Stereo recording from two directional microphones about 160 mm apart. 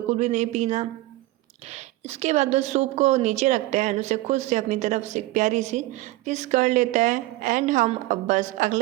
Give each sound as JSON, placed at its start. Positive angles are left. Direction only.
{"t": 0.1, "sound": "a woman's voice", "side_deg": -45}